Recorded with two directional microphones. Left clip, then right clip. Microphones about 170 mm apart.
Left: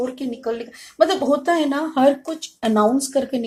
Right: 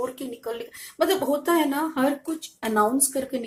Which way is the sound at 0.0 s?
25° left (ahead or behind).